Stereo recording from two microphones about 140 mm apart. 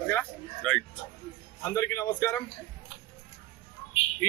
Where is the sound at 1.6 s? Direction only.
20° left (ahead or behind).